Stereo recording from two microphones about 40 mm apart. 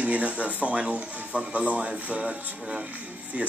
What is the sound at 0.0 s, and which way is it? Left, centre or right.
Speech, right.